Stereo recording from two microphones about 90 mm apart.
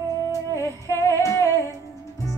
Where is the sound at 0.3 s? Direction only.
35° left (ahead or behind).